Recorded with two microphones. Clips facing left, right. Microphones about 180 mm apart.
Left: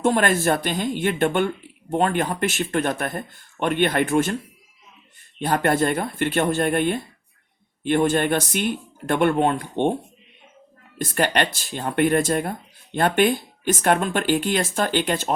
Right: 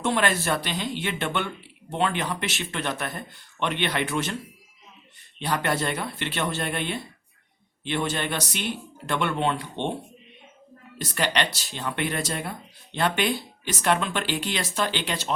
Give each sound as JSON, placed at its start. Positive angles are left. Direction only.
{"t": 0.0, "sound": "speech", "side_deg": 45}
{"t": 5.4, "sound": "speech", "side_deg": 50}